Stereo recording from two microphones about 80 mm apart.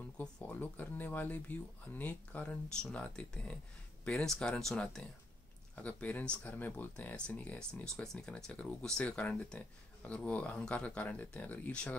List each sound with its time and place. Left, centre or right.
0.4 s speech: left